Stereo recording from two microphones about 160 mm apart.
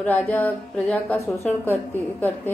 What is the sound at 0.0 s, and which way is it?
A woman's voice, 10° left (ahead or behind).